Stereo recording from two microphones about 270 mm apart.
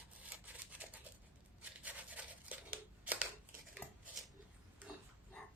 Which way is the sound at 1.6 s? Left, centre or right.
Centre.